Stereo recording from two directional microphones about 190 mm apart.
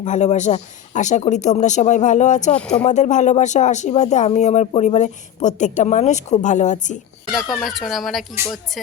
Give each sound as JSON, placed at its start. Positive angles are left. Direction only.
{"t": 0.0, "sound": "speech", "side_deg": 40}
{"t": 2.6, "sound": "speech", "side_deg": 5}
{"t": 2.8, "sound": "speech", "side_deg": 40}
{"t": 7.3, "sound": "speech", "side_deg": 0}